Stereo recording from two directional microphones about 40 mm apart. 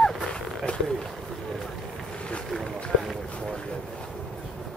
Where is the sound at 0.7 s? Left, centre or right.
Left.